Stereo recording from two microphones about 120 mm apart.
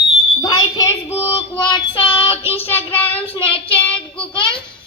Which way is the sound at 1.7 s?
45° left (ahead or behind).